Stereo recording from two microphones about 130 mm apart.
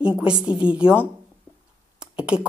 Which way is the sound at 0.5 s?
40° left (ahead or behind).